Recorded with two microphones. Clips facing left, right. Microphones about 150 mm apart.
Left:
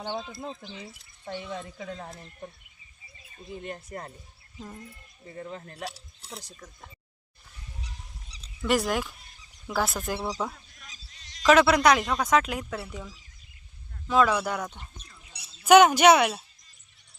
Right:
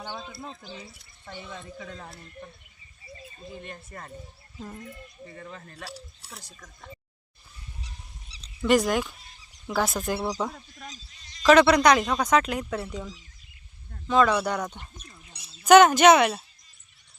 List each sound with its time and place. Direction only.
5.5 s speech: 25° left (ahead or behind)
8.6 s speech: 5° left (ahead or behind)
11.2 s a sound: 75° left (ahead or behind)
11.4 s speech: 5° left (ahead or behind)